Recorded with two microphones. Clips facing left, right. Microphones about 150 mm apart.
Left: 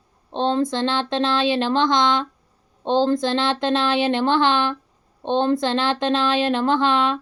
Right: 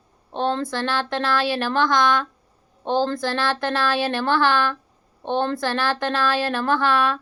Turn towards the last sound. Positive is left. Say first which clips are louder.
# left 1 dB
turn(degrees=20)  # may be behind; listen again after turning